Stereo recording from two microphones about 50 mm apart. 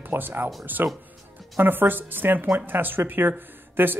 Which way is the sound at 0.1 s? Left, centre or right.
Right.